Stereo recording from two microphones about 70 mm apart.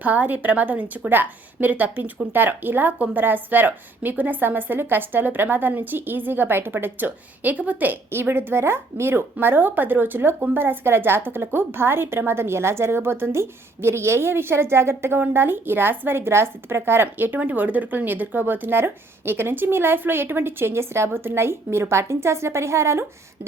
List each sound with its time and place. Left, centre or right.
0.0 s a woman's voice: right